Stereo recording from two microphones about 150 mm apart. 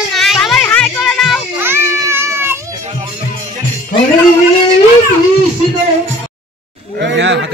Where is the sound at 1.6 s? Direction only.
15° right (ahead or behind).